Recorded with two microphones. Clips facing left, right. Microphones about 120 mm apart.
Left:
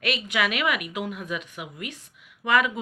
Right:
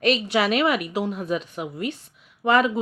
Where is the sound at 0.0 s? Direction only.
35° right (ahead or behind).